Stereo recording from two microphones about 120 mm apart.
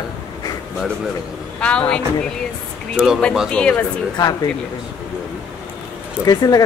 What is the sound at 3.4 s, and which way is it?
Speech, 10° left (ahead or behind).